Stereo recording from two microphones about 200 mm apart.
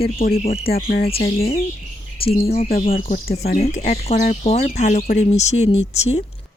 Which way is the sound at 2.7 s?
45° left (ahead or behind).